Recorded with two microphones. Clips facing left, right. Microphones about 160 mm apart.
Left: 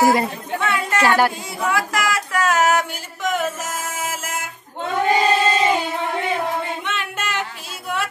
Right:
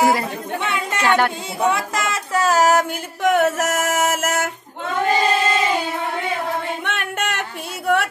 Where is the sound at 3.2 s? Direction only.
65° right (ahead or behind).